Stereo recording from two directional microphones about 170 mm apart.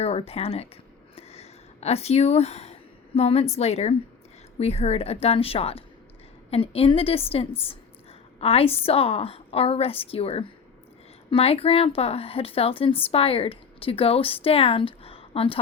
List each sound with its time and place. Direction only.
0.0 s a woman's voice: 35° left (ahead or behind)
1.1 s a sound: 40° left (ahead or behind)
3.2 s a woman's voice: 35° left (ahead or behind)